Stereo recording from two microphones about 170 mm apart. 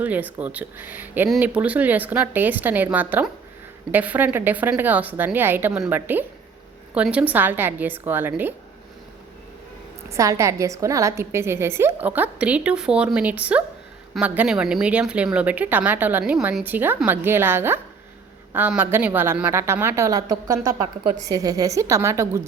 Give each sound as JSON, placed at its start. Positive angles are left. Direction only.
{"t": 0.0, "sound": "speech", "side_deg": -10}
{"t": 10.1, "sound": "speech", "side_deg": -20}